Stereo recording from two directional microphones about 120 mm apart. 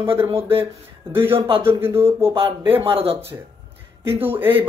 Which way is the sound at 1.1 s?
20° right (ahead or behind).